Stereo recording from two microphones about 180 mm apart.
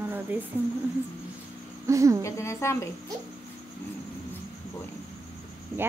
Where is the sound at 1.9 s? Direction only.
15° right (ahead or behind).